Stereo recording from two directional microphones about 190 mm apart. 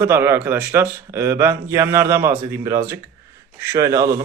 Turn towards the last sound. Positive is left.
turn(degrees=-15)  # may be behind; listen again after turning